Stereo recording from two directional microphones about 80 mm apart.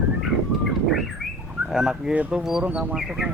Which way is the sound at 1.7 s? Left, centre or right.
Centre.